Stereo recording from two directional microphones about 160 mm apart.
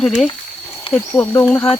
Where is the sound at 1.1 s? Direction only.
15° left (ahead or behind).